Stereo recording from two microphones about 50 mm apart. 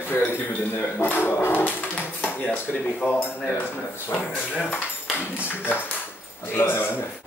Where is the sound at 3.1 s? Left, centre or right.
Left.